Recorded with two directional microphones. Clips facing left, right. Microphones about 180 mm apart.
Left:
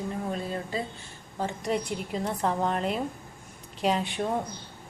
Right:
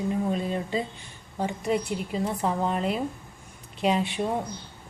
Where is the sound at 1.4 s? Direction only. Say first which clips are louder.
Right 2 dB; 10° right (ahead or behind).